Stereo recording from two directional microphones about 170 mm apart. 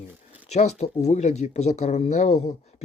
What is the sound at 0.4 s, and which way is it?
Speech, 40° left (ahead or behind).